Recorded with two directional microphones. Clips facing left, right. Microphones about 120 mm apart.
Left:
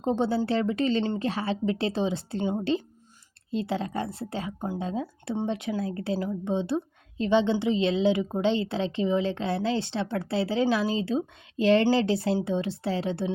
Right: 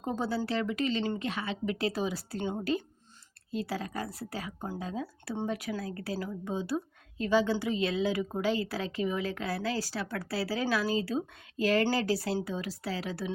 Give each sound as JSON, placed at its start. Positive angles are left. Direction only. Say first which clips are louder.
{"t": 0.0, "sound": "speech", "louder": "left 7 dB", "side_deg": 25}